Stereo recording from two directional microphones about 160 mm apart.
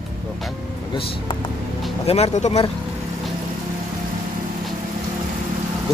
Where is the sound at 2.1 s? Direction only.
40° left (ahead or behind).